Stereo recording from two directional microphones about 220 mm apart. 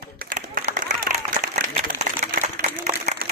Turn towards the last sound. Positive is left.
turn(degrees=-30)  # may be behind; listen again after turning